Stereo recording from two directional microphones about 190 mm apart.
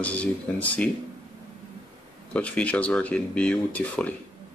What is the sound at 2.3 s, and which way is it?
Speech, 5° left (ahead or behind).